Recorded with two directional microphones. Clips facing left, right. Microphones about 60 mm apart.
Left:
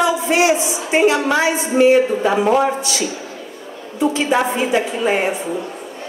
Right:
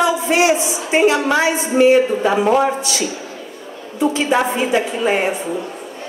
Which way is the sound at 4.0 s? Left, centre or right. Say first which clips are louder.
Even; right.